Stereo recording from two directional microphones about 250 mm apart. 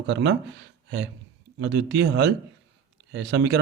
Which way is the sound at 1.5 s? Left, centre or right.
Right.